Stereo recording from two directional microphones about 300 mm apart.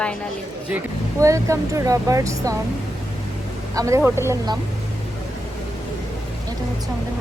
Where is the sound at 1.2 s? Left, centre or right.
Centre.